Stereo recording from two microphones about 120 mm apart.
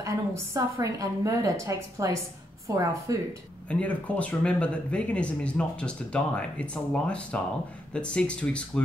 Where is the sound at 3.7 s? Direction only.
10° left (ahead or behind).